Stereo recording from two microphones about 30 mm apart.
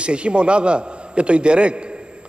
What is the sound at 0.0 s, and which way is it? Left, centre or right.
A man's voice, right.